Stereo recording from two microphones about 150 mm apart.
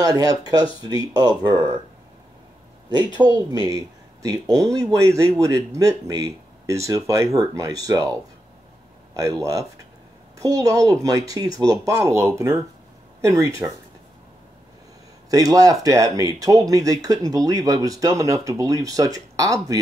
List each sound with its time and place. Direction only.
0.0 s speech: 25° right (ahead or behind)
3.2 s speech: 25° right (ahead or behind)
9.1 s speech: 25° right (ahead or behind)
15.2 s speech: 25° right (ahead or behind)